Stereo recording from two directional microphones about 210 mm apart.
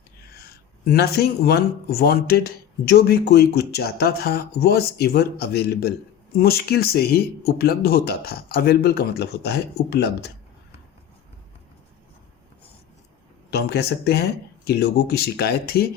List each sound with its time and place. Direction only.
0.9 s speech: 50° left (ahead or behind)
13.5 s speech: 50° left (ahead or behind)